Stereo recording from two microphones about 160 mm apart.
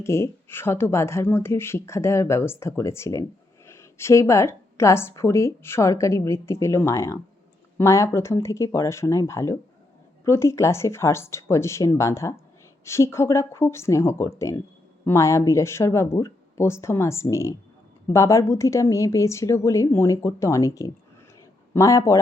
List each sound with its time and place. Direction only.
0.0 s a woman's voice: 15° left (ahead or behind)